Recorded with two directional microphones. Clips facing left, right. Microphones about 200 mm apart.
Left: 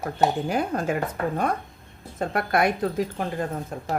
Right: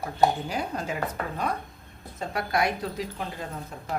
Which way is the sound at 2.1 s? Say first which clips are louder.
Left 4 dB; 55° left (ahead or behind).